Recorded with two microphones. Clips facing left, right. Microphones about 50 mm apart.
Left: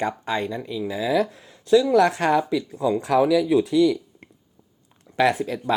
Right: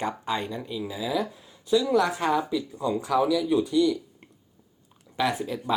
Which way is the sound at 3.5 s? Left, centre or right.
Left.